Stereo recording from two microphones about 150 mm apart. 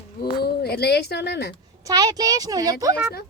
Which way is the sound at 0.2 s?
90° left.